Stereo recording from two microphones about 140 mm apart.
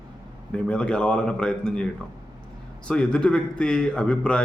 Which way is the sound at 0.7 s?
5° left (ahead or behind).